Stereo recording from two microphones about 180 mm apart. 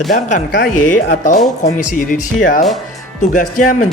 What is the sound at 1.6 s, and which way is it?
Speech, 50° left (ahead or behind).